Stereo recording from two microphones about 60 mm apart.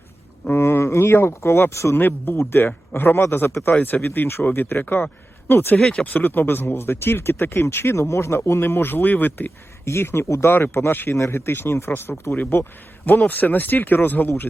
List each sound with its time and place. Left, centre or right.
0.5 s speech: left
2.0 s speech: left
3.8 s speech: left
5.8 s speech: centre
6.1 s speech: left
9.8 s speech: left
13.1 s speech: left